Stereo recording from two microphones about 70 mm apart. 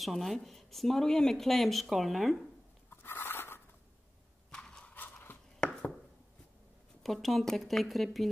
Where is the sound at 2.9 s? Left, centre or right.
Left.